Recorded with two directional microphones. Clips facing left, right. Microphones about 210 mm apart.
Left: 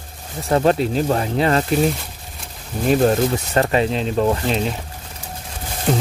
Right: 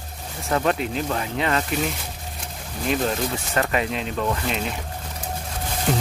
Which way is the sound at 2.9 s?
35° left (ahead or behind).